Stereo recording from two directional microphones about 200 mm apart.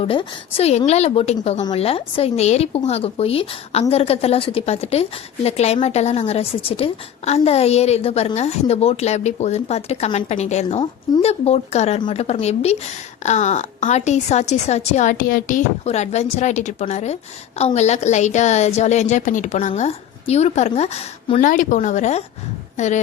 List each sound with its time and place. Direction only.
0.0 s speech: 30° left (ahead or behind)